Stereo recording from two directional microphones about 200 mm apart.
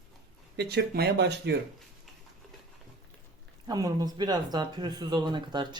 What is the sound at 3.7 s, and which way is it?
Speech, 20° right (ahead or behind).